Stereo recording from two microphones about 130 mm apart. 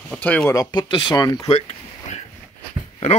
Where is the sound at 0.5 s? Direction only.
35° left (ahead or behind).